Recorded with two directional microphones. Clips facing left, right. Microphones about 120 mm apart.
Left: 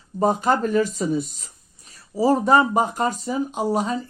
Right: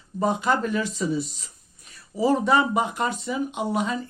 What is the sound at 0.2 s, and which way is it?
Speech, 40° left (ahead or behind).